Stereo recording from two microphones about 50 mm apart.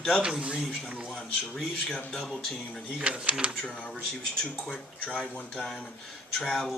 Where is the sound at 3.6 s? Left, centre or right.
Left.